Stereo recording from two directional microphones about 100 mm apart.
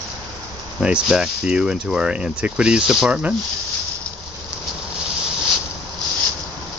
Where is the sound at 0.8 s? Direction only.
10° right (ahead or behind).